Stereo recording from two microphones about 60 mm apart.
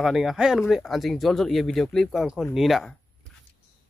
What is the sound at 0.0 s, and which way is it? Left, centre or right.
Speech, centre.